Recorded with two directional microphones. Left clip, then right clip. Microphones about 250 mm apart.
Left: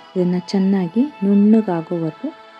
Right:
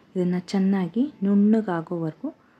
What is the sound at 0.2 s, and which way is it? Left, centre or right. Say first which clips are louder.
Speech: left 6 dB; centre.